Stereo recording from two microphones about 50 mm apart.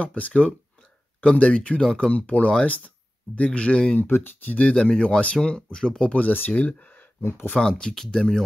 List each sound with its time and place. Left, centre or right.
0.0 s speech: left
4.0 s speech: left
4.6 s speech: left
6.1 s speech: left
7.2 s speech: left
7.5 s speech: centre